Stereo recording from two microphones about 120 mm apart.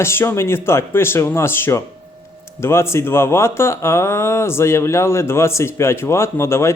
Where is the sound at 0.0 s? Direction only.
20° left (ahead or behind).